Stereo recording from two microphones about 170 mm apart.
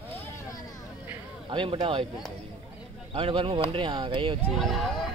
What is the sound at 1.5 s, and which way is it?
Speech, 30° right (ahead or behind).